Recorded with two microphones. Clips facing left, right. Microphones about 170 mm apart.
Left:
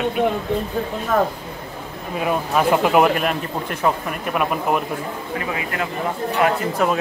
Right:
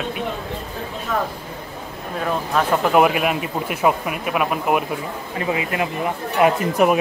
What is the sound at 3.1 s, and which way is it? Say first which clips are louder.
Speech: even; 5° right (ahead or behind).